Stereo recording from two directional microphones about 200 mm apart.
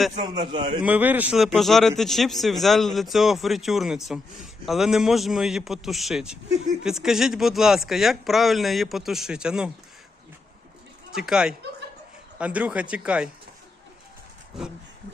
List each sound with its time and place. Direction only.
0.2 s a man's voice: 20° right (ahead or behind)
0.8 s speech: 5° right (ahead or behind)
11.1 s speech: 5° right (ahead or behind)